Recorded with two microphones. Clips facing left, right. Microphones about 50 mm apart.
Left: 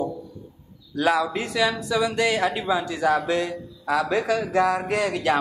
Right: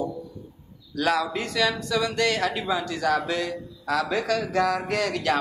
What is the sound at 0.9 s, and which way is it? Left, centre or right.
A man's voice, centre.